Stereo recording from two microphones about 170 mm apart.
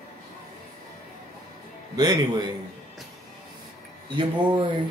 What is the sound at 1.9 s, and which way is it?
Speech, 25° right (ahead or behind).